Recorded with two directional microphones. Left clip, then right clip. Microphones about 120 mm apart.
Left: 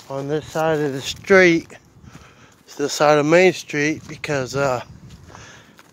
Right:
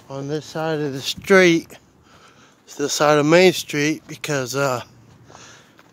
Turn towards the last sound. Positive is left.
turn(degrees=-25)  # may be behind; listen again after turning